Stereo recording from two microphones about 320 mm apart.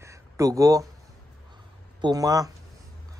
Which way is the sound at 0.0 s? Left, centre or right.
Centre.